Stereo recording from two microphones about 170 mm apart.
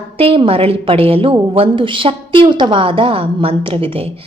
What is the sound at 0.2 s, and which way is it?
A woman's voice, 35° right (ahead or behind).